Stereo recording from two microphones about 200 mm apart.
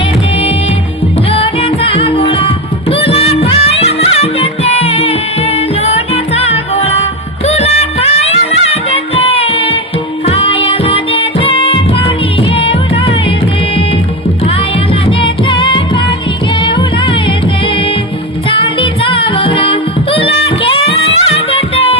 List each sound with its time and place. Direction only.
1.3 s music: 30° left (ahead or behind)
15.0 s music: 25° left (ahead or behind)
18.4 s music: 25° left (ahead or behind)